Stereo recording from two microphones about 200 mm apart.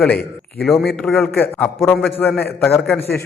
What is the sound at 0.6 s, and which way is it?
A man's voice, centre (ahead or behind).